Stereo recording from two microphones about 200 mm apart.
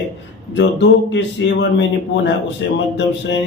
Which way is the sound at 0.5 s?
65° left (ahead or behind).